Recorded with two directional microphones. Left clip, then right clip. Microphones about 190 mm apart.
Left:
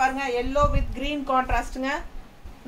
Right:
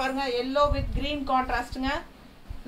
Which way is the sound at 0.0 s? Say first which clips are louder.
Left 4 dB; 10° left (ahead or behind).